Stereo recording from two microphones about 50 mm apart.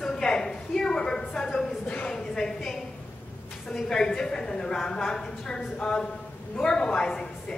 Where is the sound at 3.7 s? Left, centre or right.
Centre.